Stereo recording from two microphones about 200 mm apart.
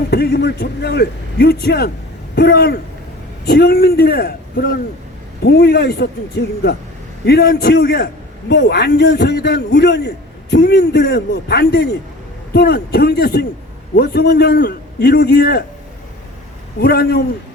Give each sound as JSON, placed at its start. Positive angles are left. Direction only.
{"t": 0.1, "sound": "a man's voice", "side_deg": 55}
{"t": 16.8, "sound": "speech", "side_deg": 55}